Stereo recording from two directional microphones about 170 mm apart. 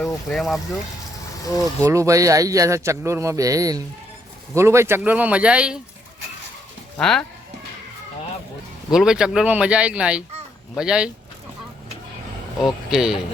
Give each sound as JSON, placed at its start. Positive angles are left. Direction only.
{"t": 0.0, "sound": "speech", "side_deg": 0}
{"t": 1.8, "sound": "speech", "side_deg": -15}
{"t": 6.9, "sound": "speech", "side_deg": 5}
{"t": 8.9, "sound": "speech", "side_deg": -5}
{"t": 12.6, "sound": "speech", "side_deg": -5}